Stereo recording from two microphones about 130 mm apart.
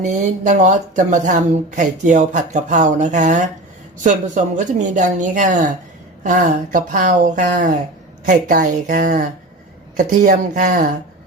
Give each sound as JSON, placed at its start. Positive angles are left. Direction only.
{"t": 0.0, "sound": "speech", "side_deg": -70}